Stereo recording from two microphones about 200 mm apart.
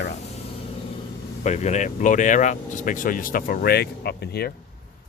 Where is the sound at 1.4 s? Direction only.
35° left (ahead or behind).